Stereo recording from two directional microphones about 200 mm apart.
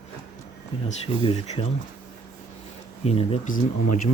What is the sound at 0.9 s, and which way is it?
Speech, 25° left (ahead or behind).